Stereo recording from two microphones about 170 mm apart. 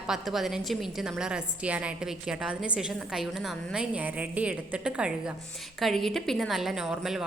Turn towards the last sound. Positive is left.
turn(degrees=-5)  # may be behind; listen again after turning